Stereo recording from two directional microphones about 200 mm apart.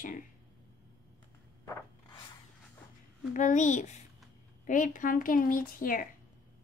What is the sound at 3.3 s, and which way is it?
A woman's voice, 40° left (ahead or behind).